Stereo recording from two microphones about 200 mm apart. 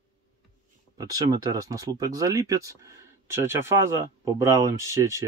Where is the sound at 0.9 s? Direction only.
20° right (ahead or behind).